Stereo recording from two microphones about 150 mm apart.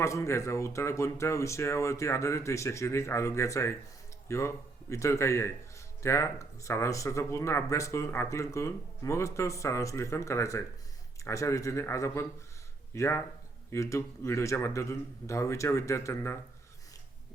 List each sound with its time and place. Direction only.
0.0 s a man's voice: 20° left (ahead or behind)